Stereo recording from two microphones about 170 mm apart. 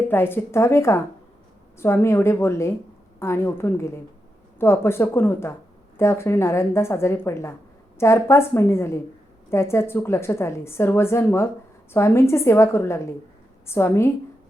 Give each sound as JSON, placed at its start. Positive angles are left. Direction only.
{"t": 0.1, "sound": "a woman's voice", "side_deg": 10}